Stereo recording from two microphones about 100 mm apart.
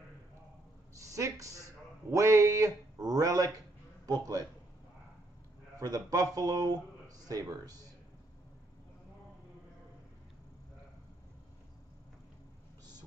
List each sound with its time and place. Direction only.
0.9 s speech: 35° right (ahead or behind)
5.8 s speech: 40° right (ahead or behind)